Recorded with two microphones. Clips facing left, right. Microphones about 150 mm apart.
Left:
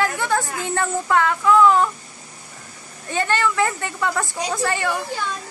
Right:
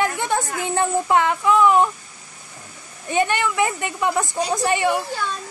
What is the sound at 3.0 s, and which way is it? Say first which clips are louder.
A woman's voice: right 1 dB; 15° right (ahead or behind).